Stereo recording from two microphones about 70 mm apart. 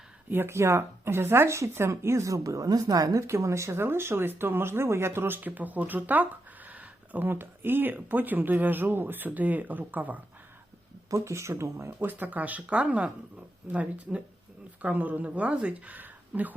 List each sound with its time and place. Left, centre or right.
0.3 s speech: right
11.1 s speech: right